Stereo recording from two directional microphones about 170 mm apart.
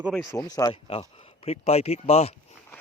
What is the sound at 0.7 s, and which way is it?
Speech, 35° left (ahead or behind).